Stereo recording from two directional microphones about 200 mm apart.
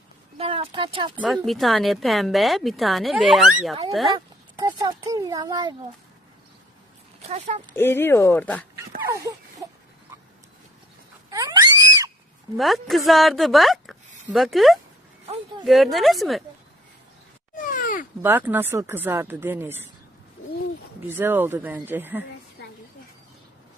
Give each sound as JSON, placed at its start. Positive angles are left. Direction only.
{"t": 0.3, "sound": "speech", "side_deg": -25}
{"t": 1.1, "sound": "speech", "side_deg": -5}
{"t": 4.6, "sound": "speech", "side_deg": -15}
{"t": 7.3, "sound": "speech", "side_deg": -35}
{"t": 7.7, "sound": "speech", "side_deg": 10}
{"t": 9.0, "sound": "a sound", "side_deg": -15}
{"t": 11.3, "sound": "a sound", "side_deg": -20}
{"t": 12.5, "sound": "speech", "side_deg": 0}
{"t": 17.5, "sound": "groan", "side_deg": 40}
{"t": 18.2, "sound": "speech", "side_deg": -10}
{"t": 21.1, "sound": "speech", "side_deg": -10}